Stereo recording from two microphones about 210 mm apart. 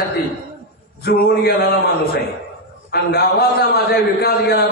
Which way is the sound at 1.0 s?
50° left (ahead or behind).